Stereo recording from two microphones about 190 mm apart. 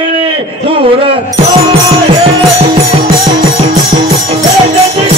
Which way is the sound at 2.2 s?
30° right (ahead or behind).